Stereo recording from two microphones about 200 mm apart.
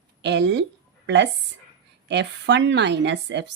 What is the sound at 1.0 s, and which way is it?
A woman's voice, 60° right (ahead or behind).